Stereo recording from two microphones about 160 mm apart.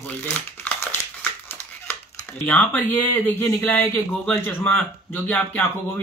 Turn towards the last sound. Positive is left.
turn(degrees=10)  # may be behind; listen again after turning